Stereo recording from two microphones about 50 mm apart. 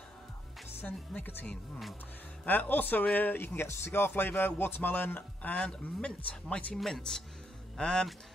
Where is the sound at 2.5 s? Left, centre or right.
Left.